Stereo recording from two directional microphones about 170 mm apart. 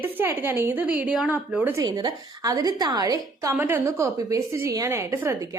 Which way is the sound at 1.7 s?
25° right (ahead or behind).